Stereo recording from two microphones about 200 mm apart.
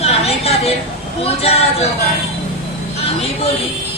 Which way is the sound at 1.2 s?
30° left (ahead or behind).